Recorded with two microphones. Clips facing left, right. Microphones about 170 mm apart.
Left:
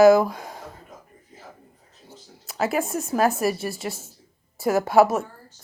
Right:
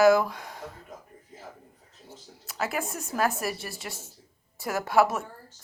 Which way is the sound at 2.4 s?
25° left (ahead or behind).